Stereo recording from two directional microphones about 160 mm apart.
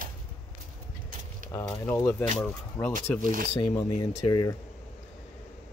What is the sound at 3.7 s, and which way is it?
Speech, 25° left (ahead or behind).